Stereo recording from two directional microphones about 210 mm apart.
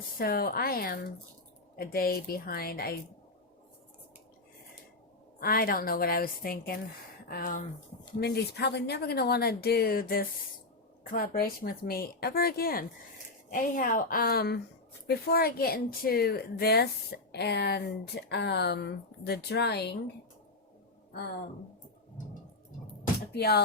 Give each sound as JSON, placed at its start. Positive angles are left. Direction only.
{"t": 0.2, "sound": "a woman's voice", "side_deg": 45}
{"t": 5.4, "sound": "a woman's voice", "side_deg": 45}
{"t": 23.3, "sound": "a woman's voice", "side_deg": 50}